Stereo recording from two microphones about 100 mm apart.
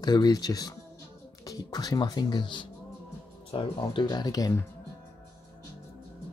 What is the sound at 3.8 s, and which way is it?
Speech, 50° left (ahead or behind).